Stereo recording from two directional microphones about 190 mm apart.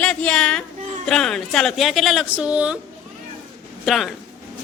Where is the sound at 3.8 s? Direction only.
Centre (ahead or behind).